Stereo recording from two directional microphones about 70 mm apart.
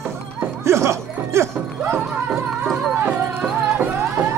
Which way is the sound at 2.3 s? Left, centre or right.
Centre.